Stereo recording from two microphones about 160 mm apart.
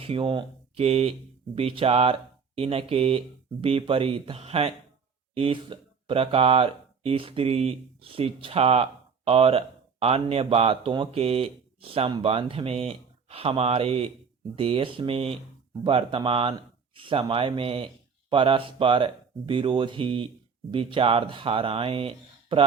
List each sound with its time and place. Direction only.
0.0 s speech: 35° right (ahead or behind)